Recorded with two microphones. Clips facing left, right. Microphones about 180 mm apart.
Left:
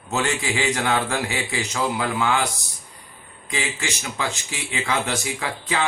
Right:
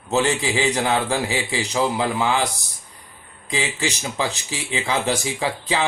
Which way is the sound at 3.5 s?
35° right (ahead or behind).